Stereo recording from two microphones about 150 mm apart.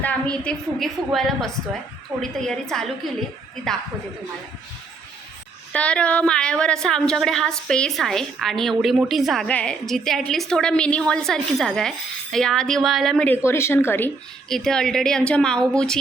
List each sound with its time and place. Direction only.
0.0 s a woman's voice: 10° left (ahead or behind)
5.7 s a woman's voice: 10° left (ahead or behind)
13.2 s a woman's voice: 15° left (ahead or behind)
14.5 s a woman's voice: 5° left (ahead or behind)